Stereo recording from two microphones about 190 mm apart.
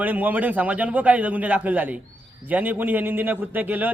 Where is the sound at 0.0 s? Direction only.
10° right (ahead or behind).